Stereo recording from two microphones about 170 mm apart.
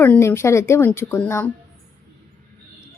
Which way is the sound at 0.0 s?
15° left (ahead or behind).